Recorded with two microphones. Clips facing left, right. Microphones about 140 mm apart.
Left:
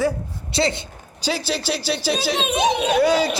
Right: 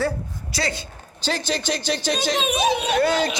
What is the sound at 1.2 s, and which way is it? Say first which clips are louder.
A man's voice: left 1 dB; 5° left (ahead or behind).